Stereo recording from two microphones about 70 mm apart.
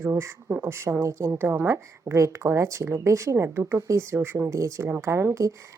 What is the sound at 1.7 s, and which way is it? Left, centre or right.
Speech, right.